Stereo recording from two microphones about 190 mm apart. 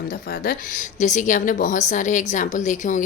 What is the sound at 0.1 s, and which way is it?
A woman's voice, 50° left (ahead or behind).